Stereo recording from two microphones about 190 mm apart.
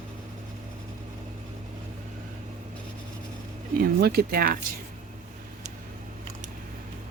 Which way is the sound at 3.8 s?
55° right (ahead or behind).